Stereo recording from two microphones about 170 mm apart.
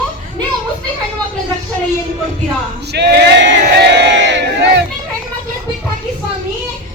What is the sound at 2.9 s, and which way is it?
Crowd, 80° right.